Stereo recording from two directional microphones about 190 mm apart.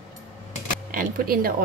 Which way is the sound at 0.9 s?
50° right (ahead or behind).